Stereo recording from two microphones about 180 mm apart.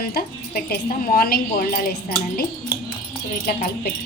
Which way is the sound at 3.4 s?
55° left (ahead or behind).